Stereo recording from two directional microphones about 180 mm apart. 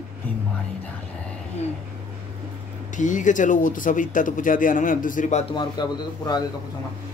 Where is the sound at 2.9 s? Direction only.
45° left (ahead or behind).